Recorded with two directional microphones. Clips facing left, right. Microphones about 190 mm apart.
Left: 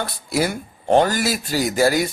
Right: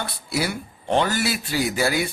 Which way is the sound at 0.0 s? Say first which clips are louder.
Left 4 dB; 45° left (ahead or behind).